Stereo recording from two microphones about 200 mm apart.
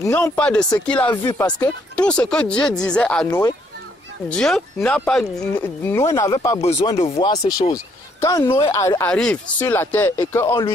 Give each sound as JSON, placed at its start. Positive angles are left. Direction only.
{"t": 0.0, "sound": "speech", "side_deg": 15}
{"t": 0.4, "sound": "speech", "side_deg": 5}
{"t": 6.6, "sound": "speech", "side_deg": 30}
{"t": 9.1, "sound": "speech", "side_deg": 5}